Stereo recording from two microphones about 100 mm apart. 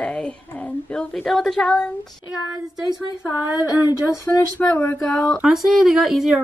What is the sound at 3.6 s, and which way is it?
Speech, 35° left (ahead or behind).